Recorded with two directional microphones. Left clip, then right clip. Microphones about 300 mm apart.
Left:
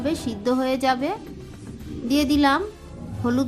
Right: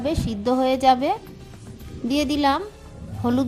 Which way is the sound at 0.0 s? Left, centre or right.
Right.